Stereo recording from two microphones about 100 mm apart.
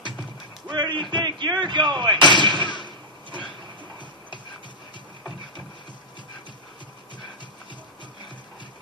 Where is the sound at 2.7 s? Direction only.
50° left (ahead or behind).